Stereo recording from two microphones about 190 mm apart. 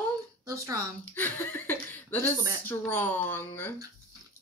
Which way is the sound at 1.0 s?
10° left (ahead or behind).